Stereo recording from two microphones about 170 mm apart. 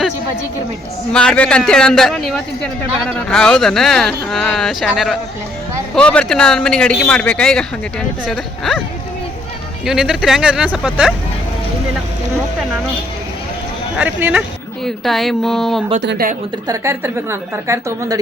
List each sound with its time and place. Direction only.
1.1 s speech: 5° left (ahead or behind)
9.8 s speech: 5° right (ahead or behind)
14.0 s a woman's voice: 10° right (ahead or behind)
14.8 s speech: centre (ahead or behind)
16.0 s speech: 80° right
16.6 s a woman's voice: 15° right (ahead or behind)